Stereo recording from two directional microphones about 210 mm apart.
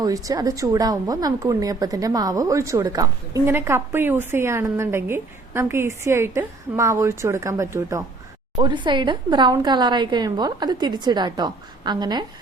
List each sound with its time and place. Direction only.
0.0 s a woman's voice: 15° right (ahead or behind)